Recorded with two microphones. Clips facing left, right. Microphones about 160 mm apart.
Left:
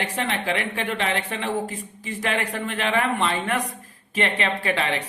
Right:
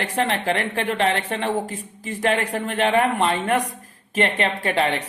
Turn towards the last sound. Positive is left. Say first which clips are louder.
# right 3 dB
turn(degrees=-45)  # may be behind; listen again after turning